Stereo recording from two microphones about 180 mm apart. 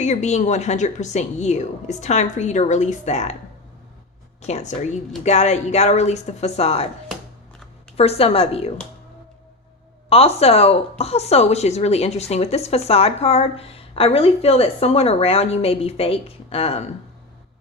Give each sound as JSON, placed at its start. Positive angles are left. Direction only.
{"t": 0.0, "sound": "a woman's voice", "side_deg": 40}
{"t": 4.4, "sound": "a woman's voice", "side_deg": 40}
{"t": 7.9, "sound": "a woman's voice", "side_deg": 35}
{"t": 10.1, "sound": "a woman's voice", "side_deg": 35}